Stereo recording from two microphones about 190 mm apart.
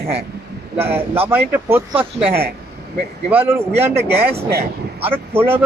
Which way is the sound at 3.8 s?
10° right (ahead or behind).